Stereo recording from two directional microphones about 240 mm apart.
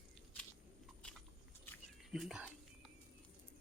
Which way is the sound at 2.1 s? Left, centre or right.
Centre.